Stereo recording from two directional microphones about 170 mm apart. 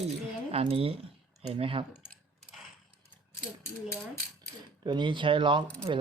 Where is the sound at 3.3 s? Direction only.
15° left (ahead or behind).